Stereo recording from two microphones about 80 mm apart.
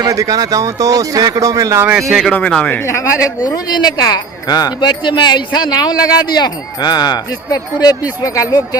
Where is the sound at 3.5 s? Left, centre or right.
Left.